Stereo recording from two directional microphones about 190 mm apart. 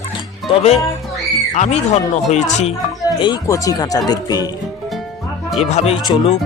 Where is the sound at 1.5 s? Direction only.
35° left (ahead or behind).